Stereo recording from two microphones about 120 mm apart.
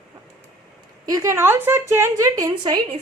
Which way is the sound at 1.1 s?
25° right (ahead or behind).